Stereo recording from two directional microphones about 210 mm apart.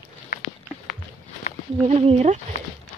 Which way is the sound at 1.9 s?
30° right (ahead or behind).